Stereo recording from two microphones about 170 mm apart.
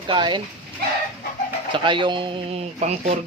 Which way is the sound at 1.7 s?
30° right (ahead or behind).